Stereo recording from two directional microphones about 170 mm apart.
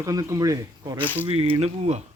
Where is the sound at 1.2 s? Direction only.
35° right (ahead or behind).